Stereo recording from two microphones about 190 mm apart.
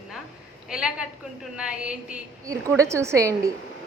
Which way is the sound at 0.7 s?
5° right (ahead or behind).